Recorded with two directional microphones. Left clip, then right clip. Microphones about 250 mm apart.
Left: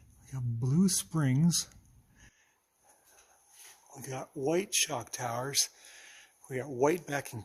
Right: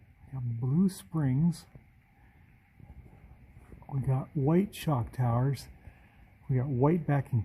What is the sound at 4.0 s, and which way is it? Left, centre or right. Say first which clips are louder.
Speech: right 2 dB; centre.